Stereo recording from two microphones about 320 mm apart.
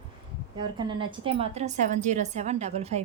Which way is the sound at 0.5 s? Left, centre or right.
Centre.